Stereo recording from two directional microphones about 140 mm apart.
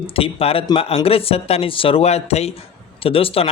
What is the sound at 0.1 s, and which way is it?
Speech, 45° left (ahead or behind).